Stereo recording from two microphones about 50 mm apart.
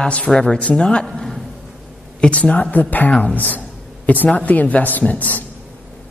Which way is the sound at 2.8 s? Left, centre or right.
Left.